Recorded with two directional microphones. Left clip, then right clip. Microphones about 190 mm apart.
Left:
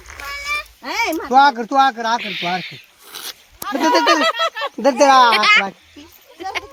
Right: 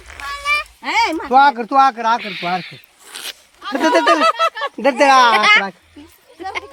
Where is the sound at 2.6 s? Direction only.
45° right (ahead or behind).